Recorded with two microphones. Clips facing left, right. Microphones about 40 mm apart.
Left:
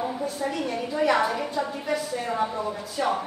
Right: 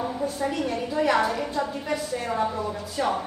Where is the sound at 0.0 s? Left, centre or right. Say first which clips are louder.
Right 1 dB; centre.